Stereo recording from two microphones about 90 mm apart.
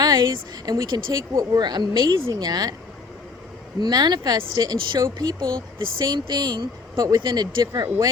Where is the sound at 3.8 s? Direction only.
50° right (ahead or behind).